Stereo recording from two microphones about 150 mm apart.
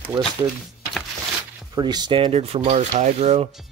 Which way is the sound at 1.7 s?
30° right (ahead or behind).